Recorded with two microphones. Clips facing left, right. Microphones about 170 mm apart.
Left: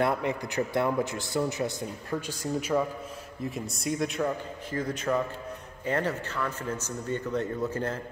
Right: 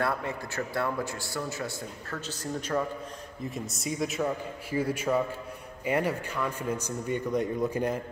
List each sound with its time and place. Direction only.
0.0 s a man's voice: 20° left (ahead or behind); by 8.0 s 15° right (ahead or behind)